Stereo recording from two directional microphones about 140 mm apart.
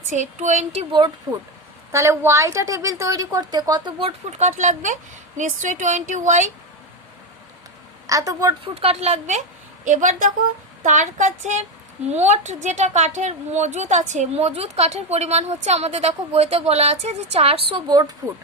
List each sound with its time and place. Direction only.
0.1 s speech: 60° right (ahead or behind)
1.3 s a woman's voice: 20° right (ahead or behind)
4.3 s speech: 55° right (ahead or behind)
8.0 s a woman's voice: 25° right (ahead or behind)
8.6 s a woman's voice: 45° right (ahead or behind); by 18.1 s 30° right (ahead or behind)